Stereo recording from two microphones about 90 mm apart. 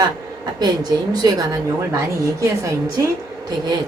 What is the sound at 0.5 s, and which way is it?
A woman's voice, 50° right (ahead or behind).